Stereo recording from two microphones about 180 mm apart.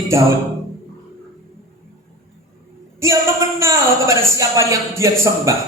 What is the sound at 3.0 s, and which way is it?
A man's voice, 15° right (ahead or behind).